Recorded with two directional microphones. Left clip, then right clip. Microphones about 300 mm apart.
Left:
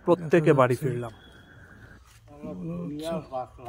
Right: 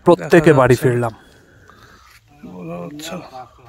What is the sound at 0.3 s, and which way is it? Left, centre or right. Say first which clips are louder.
Speech: right 8 dB; right.